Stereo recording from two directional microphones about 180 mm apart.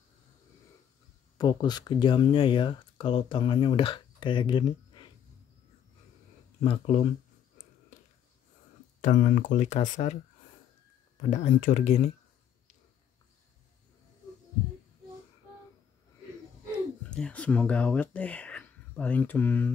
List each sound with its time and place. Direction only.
1.4 s speech: 20° left (ahead or behind)
6.6 s speech: 35° left (ahead or behind)
9.0 s speech: 45° left (ahead or behind)
11.2 s speech: 45° left (ahead or behind)
16.7 s speech: 5° left (ahead or behind)